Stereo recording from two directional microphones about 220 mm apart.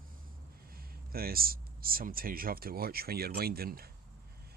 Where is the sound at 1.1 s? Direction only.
45° right (ahead or behind).